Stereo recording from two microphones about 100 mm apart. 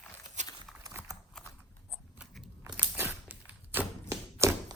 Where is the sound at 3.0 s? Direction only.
20° right (ahead or behind).